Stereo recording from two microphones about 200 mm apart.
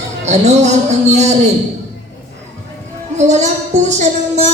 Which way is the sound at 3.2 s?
35° right (ahead or behind).